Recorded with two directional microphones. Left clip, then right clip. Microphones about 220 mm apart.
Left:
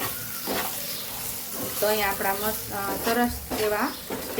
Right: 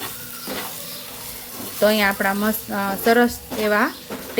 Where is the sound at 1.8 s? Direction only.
45° right (ahead or behind).